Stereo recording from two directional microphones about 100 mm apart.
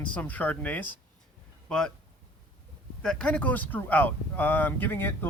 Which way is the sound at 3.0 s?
10° left (ahead or behind).